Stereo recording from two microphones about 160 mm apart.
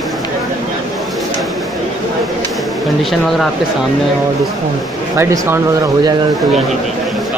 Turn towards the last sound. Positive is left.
turn(degrees=-20)  # may be behind; listen again after turning